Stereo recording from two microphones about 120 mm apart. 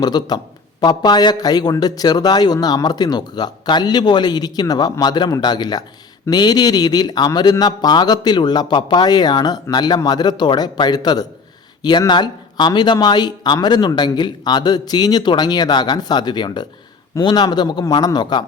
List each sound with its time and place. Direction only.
0.0 s speech: 35° left (ahead or behind)